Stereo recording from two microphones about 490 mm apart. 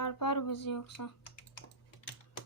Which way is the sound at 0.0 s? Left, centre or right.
Left.